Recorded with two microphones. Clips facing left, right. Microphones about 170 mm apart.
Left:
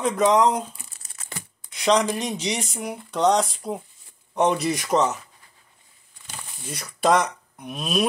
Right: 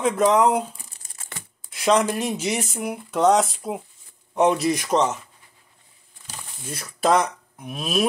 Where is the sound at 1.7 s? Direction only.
5° right (ahead or behind).